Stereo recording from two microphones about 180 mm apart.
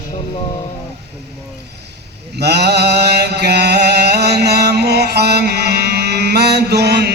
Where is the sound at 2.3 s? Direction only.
65° right (ahead or behind).